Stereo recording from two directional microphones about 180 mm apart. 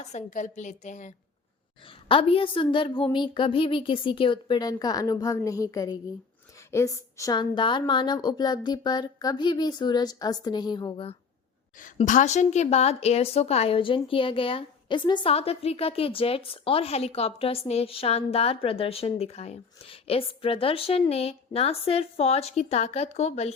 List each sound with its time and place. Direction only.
0.0 s a woman's voice: 40° left (ahead or behind)
2.0 s a woman's voice: 30° left (ahead or behind)
11.9 s a woman's voice: 40° left (ahead or behind)